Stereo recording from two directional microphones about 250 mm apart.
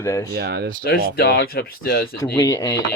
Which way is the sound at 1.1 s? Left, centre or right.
Left.